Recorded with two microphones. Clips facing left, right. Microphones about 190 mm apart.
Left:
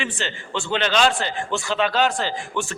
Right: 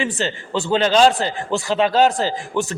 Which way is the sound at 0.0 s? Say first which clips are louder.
Right 6 dB; 35° right (ahead or behind).